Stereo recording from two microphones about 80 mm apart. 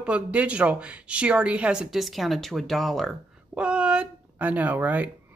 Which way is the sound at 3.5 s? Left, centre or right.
Centre.